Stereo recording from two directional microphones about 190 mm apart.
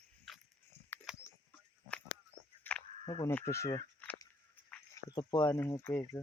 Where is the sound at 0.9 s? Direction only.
10° left (ahead or behind).